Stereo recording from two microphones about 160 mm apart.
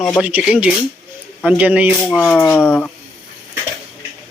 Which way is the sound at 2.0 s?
10° left (ahead or behind).